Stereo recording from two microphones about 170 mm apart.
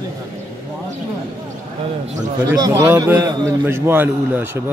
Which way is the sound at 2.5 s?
20° right (ahead or behind).